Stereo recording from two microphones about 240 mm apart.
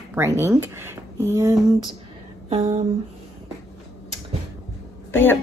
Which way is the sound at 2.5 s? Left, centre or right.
Right.